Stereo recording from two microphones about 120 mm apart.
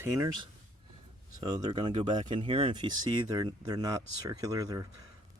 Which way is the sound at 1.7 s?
60° right (ahead or behind).